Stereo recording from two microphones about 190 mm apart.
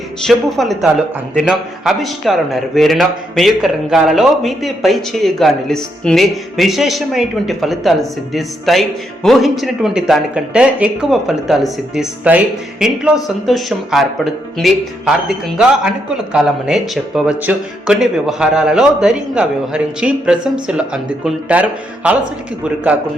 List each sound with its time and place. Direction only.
0.3 s a man's voice: centre (ahead or behind)